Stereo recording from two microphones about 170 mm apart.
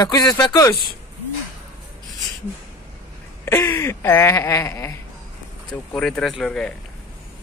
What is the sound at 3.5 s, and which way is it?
Speech, 15° left (ahead or behind).